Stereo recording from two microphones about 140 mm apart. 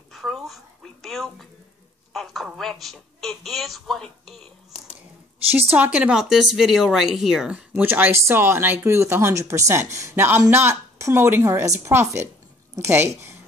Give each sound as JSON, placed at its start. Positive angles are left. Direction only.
{"t": 0.1, "sound": "dog", "side_deg": 0}
{"t": 1.0, "sound": "a sound", "side_deg": 0}
{"t": 2.1, "sound": "a woman's voice", "side_deg": 0}
{"t": 5.7, "sound": "speech", "side_deg": -10}